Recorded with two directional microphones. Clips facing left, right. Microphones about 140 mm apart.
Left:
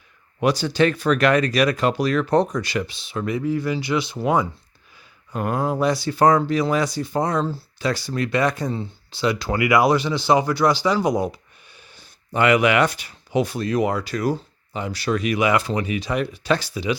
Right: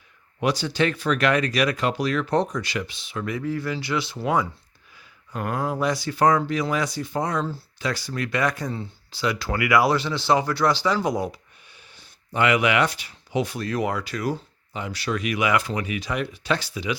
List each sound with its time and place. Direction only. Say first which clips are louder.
0.3 s speech: left 4 dB; 45° left (ahead or behind); by 11.3 s 20° left (ahead or behind)
11.7 s a sound: left 3 dB; 40° left (ahead or behind)
13.6 s speech: left 4 dB; 20° left (ahead or behind)
13.9 s speech: left 4 dB; 35° left (ahead or behind)